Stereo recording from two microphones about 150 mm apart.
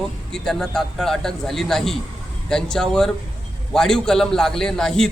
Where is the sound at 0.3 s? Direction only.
5° left (ahead or behind).